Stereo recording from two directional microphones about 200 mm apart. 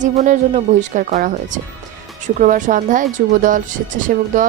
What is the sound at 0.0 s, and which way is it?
Speech, 35° right (ahead or behind).